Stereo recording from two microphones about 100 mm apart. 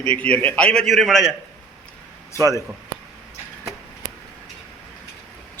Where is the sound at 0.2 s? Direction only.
15° left (ahead or behind).